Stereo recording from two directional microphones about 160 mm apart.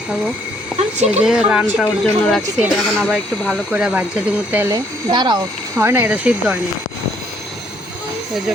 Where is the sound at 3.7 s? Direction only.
10° right (ahead or behind); by 5.4 s 25° right (ahead or behind).